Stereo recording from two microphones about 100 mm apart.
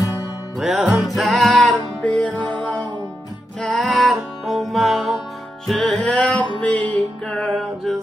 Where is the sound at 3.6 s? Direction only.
5° left (ahead or behind).